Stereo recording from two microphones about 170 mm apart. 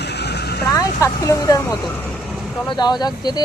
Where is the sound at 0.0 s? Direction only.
80° left.